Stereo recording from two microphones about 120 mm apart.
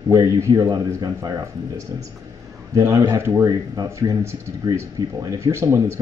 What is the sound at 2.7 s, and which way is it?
Speech, 25° right (ahead or behind).